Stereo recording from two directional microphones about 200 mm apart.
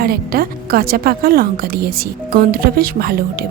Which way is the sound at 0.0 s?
50° right (ahead or behind).